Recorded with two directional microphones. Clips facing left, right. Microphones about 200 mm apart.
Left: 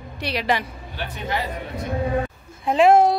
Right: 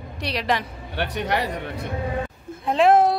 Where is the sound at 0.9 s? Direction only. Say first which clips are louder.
Right 4 dB; 70° right (ahead or behind).